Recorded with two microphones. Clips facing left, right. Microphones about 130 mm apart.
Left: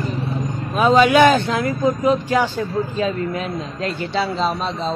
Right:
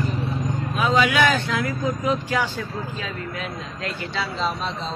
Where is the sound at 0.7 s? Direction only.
35° left (ahead or behind).